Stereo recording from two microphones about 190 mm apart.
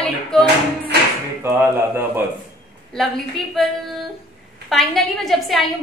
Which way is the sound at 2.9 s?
Centre (ahead or behind).